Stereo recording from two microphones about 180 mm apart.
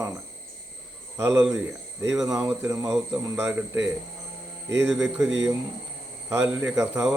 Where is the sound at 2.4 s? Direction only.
10° right (ahead or behind).